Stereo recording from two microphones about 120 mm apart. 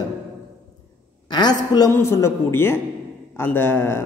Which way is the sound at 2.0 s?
20° left (ahead or behind).